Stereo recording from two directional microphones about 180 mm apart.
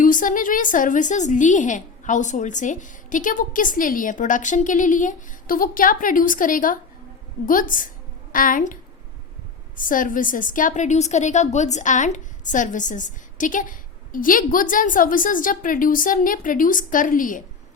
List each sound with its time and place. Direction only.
0.0 s a woman's voice: 45° left (ahead or behind)